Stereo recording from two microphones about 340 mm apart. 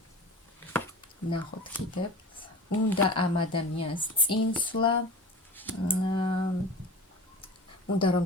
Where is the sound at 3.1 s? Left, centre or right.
Centre.